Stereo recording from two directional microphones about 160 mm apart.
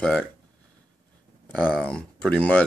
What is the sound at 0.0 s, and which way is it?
Speech, 5° left (ahead or behind).